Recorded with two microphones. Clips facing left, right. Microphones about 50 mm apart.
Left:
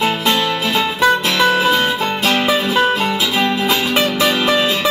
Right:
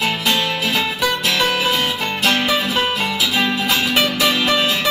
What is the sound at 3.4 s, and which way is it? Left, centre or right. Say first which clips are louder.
Music: left 2 dB; left.